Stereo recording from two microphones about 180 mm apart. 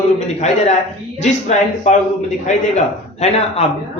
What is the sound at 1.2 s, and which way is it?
Speech, 40° left (ahead or behind).